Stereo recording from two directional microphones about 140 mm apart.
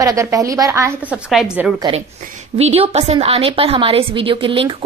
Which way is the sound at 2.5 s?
45° right (ahead or behind).